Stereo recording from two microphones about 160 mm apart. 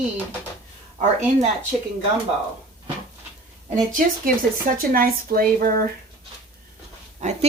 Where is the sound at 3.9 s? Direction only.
60° right (ahead or behind).